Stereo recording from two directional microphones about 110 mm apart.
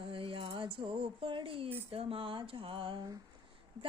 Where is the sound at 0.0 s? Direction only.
55° right (ahead or behind).